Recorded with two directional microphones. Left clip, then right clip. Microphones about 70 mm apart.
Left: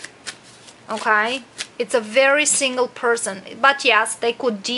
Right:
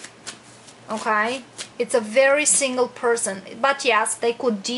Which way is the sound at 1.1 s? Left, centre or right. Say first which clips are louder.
Left 3 dB; left.